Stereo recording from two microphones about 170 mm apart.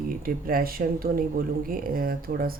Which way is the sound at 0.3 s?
60° right (ahead or behind).